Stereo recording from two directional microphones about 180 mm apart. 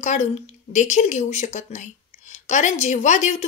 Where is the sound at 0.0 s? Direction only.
40° left (ahead or behind).